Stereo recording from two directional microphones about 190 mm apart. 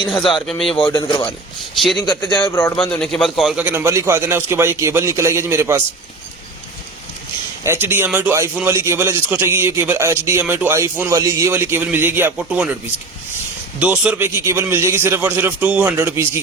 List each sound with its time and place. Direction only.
0.0 s speech: 25° left (ahead or behind)
0.4 s speech: centre (ahead or behind)
0.9 s speech: 20° left (ahead or behind)
1.7 s speech: centre (ahead or behind)
2.0 s speech: 25° left (ahead or behind)
2.7 s a man's voice: 5° left (ahead or behind); by 5.8 s 15° right (ahead or behind)
7.6 s a man's voice: 15° right (ahead or behind)
13.7 s a man's voice: 5° right (ahead or behind)